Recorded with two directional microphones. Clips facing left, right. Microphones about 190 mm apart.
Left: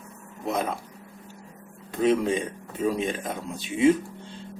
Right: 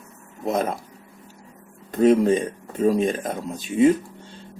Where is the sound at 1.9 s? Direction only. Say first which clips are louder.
Right 6 dB; 45° right (ahead or behind).